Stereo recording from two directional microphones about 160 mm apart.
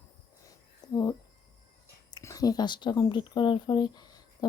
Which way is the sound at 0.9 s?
25° left (ahead or behind).